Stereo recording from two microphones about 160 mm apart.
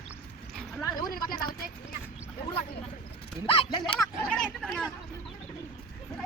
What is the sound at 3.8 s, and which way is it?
Speech, 5° left (ahead or behind).